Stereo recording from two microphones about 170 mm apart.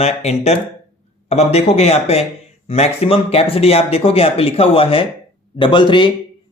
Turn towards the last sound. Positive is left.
turn(degrees=30)  # may be behind; listen again after turning